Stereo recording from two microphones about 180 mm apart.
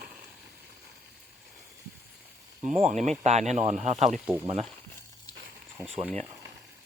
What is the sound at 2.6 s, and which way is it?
Speech, 40° right (ahead or behind).